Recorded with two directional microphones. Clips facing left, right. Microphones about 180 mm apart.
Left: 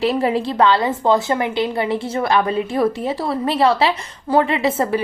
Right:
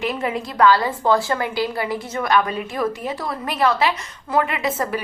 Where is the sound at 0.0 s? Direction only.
35° left (ahead or behind).